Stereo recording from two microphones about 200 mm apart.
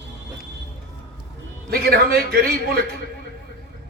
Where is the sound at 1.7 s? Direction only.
50° right (ahead or behind).